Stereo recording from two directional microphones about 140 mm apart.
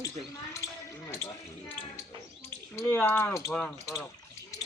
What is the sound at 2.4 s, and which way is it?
Bird, 15° left (ahead or behind).